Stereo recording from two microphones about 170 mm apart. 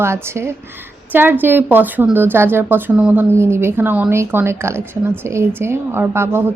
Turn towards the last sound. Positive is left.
turn(degrees=-15)  # may be behind; listen again after turning